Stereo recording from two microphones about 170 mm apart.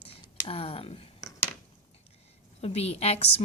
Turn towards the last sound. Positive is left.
turn(degrees=35)  # may be behind; listen again after turning